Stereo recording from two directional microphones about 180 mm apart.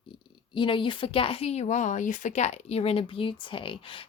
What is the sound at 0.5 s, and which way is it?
Speech, 30° left (ahead or behind).